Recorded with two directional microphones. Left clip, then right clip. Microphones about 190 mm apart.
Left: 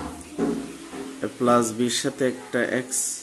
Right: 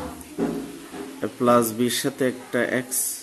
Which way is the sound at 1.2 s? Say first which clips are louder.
Right 1 dB; 15° right (ahead or behind).